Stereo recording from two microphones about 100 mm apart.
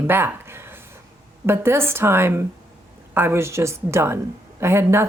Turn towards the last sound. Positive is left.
turn(degrees=-25)  # may be behind; listen again after turning